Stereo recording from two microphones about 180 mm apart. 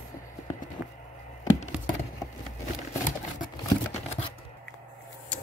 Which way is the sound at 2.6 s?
45° left (ahead or behind).